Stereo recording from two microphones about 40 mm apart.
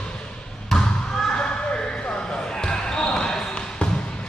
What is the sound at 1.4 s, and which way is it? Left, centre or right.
Basketball bounce, left.